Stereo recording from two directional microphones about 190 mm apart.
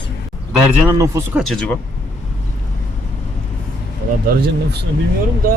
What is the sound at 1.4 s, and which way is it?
Speech, centre (ahead or behind).